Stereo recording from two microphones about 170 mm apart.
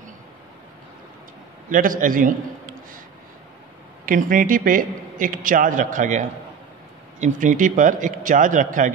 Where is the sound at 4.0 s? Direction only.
55° right (ahead or behind).